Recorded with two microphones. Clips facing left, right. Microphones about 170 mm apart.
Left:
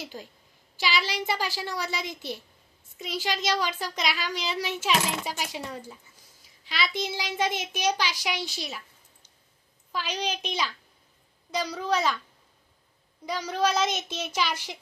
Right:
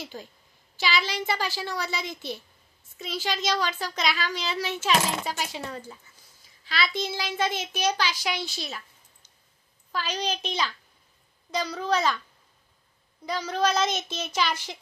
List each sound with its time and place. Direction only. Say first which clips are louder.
0.0 s a child's voice: even; 10° left (ahead or behind)
13.2 s a child's voice: right 1 dB; 10° left (ahead or behind)